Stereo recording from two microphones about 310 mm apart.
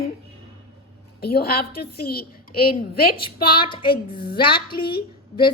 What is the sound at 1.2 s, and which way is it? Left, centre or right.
A woman's voice, left.